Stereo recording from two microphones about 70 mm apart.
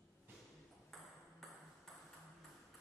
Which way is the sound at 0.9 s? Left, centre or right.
Centre.